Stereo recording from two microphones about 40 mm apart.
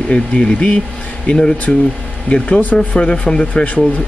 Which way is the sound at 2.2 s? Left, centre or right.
Left.